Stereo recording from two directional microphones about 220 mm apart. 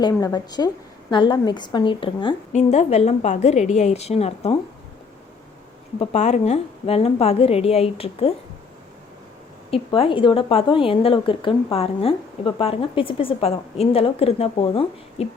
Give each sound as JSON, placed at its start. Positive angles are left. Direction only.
{"t": 0.0, "sound": "a woman's voice", "side_deg": 15}
{"t": 6.0, "sound": "a woman's voice", "side_deg": 30}
{"t": 9.6, "sound": "a woman's voice", "side_deg": 25}